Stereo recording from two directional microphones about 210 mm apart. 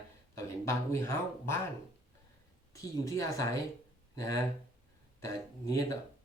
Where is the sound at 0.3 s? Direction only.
15° left (ahead or behind).